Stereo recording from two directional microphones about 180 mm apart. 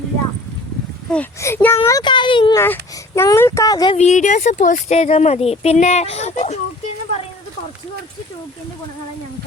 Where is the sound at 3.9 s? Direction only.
40° left (ahead or behind).